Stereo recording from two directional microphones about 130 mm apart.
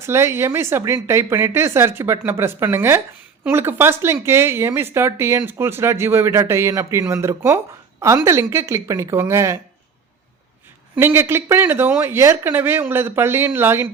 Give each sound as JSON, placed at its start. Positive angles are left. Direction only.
{"t": 0.0, "sound": "speech", "side_deg": -20}
{"t": 10.9, "sound": "speech", "side_deg": -20}